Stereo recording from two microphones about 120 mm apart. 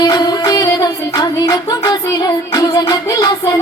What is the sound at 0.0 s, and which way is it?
Music, 35° left (ahead or behind).